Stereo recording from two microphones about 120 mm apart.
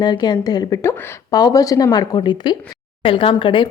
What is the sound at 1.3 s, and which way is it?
A woman's voice, 35° left (ahead or behind).